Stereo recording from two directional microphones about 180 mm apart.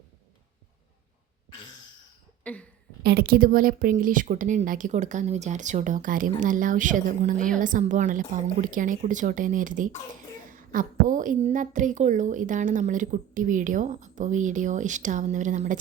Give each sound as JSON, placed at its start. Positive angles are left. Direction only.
{"t": 2.4, "sound": "cough", "side_deg": 5}
{"t": 3.0, "sound": "a woman's voice", "side_deg": -60}